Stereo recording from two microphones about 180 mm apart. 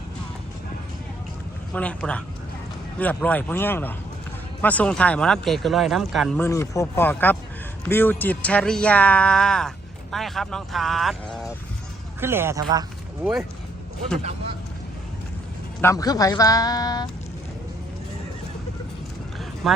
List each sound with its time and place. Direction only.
1.7 s speech: 5° left (ahead or behind)
6.4 s speech: 15° left (ahead or behind); by 11.2 s centre (ahead or behind)
12.2 s speech: 15° right (ahead or behind)
15.8 s a man's voice: 15° left (ahead or behind)
19.6 s speech: centre (ahead or behind)